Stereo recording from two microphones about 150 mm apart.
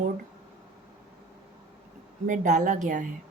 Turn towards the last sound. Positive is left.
turn(degrees=-55)  # may be behind; listen again after turning